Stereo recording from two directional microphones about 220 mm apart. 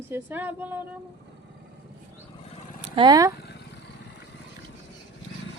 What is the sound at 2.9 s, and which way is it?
Female singing, 20° right (ahead or behind).